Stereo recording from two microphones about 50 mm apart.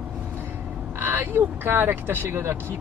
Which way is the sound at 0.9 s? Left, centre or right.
Right.